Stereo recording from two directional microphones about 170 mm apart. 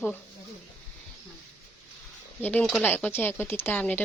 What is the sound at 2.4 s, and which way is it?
Speech, 10° left (ahead or behind).